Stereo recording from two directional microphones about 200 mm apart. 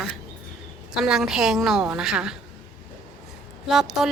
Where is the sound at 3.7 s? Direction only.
Centre (ahead or behind).